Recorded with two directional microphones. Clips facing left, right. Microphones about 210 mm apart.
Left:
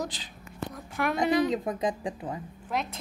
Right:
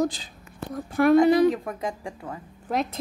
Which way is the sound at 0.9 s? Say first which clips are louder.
Right 12 dB; 35° right (ahead or behind).